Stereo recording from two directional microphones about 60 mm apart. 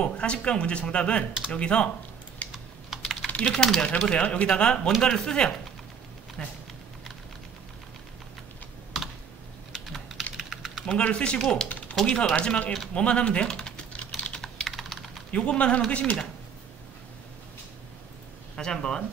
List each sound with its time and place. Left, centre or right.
0.0 s speech: centre
2.5 s typing: centre
3.3 s typing: centre
3.5 s speech: centre
9.7 s typing: centre
10.9 s speech: centre
11.9 s speech: centre
12.4 s speech: left
12.9 s typing: centre
14.6 s computer keyboard: centre
15.3 s speech: centre
18.6 s speech: centre